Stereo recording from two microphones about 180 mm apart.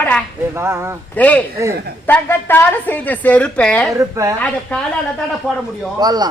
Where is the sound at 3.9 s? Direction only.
15° right (ahead or behind).